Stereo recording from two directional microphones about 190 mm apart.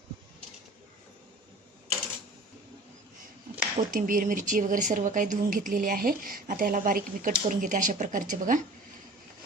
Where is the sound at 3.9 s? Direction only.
45° right (ahead or behind).